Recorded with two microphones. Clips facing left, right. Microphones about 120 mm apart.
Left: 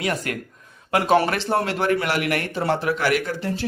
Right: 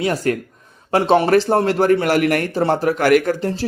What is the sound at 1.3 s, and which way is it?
A man's voice, 40° right (ahead or behind).